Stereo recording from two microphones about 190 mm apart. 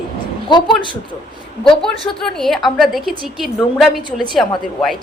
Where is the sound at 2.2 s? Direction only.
Centre (ahead or behind).